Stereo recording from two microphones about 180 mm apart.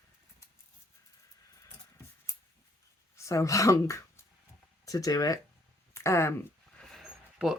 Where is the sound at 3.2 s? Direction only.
15° left (ahead or behind).